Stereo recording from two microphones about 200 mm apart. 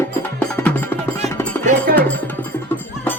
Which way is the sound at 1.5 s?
10° left (ahead or behind).